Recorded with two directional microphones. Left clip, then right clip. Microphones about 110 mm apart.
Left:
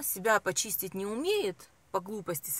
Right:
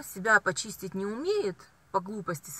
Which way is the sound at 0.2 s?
10° left (ahead or behind).